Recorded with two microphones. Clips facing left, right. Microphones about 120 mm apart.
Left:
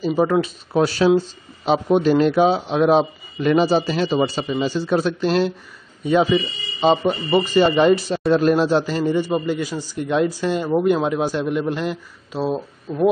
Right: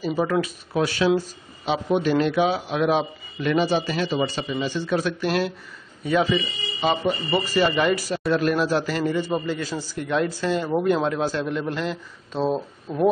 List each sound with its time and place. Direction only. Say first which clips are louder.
0.3 s a man's voice: left 4 dB; 30° left (ahead or behind)
12.3 s speech: left 1 dB; 5° left (ahead or behind)
12.9 s owl: left 2 dB; 15° right (ahead or behind)